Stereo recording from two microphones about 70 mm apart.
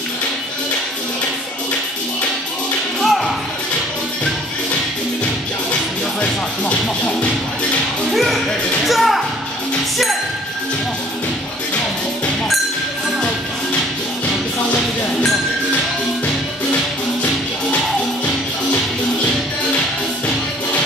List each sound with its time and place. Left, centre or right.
3.0 s music: centre
6.2 s music: centre
8.1 s music: centre
17.2 s music: centre